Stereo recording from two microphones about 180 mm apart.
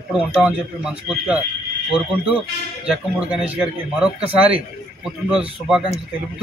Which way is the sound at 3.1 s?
5° right (ahead or behind).